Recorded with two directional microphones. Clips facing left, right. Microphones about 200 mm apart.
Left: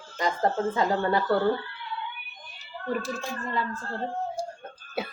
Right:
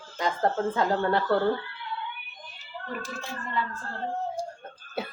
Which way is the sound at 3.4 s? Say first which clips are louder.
Even; 40° left (ahead or behind).